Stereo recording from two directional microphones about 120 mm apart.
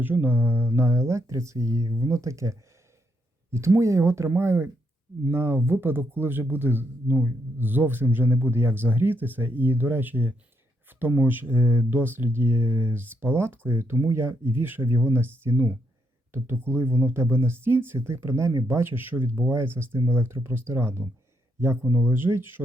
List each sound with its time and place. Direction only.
0.0 s speech: 15° right (ahead or behind)